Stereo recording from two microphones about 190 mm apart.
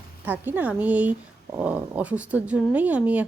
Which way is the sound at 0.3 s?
10° right (ahead or behind).